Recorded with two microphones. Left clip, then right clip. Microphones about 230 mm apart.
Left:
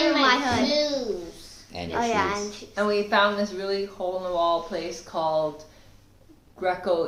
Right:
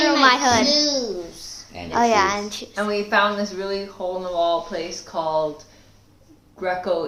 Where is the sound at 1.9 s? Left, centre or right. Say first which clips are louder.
Right 7 dB; right.